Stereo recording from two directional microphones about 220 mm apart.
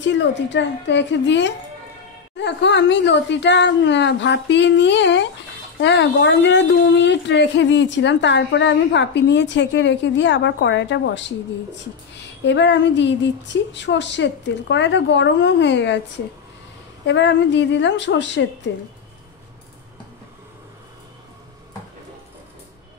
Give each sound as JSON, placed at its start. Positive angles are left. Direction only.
{"t": 0.0, "sound": "speech", "side_deg": 55}
{"t": 17.0, "sound": "speech", "side_deg": 55}